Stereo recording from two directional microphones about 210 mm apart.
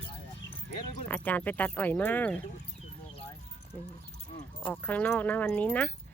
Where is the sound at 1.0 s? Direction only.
5° left (ahead or behind).